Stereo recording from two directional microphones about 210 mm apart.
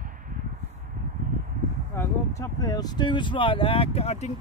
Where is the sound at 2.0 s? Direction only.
15° left (ahead or behind).